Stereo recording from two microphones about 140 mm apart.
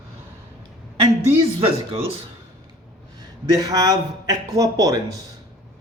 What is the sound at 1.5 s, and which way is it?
Speech, 45° right (ahead or behind).